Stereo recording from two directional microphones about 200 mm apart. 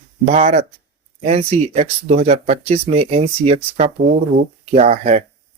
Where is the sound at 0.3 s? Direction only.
35° right (ahead or behind).